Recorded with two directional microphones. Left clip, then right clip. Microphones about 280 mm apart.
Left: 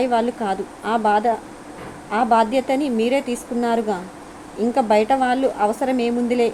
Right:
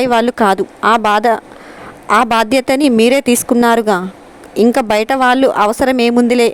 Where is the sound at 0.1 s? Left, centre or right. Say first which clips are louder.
Right 9 dB; right.